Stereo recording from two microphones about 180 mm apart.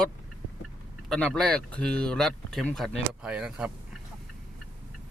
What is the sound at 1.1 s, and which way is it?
Speech, 5° left (ahead or behind).